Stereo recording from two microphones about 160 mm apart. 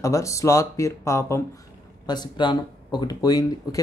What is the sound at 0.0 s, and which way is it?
Speech, 20° left (ahead or behind).